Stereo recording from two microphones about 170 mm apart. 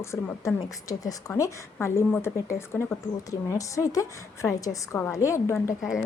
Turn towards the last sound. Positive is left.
turn(degrees=15)  # may be behind; listen again after turning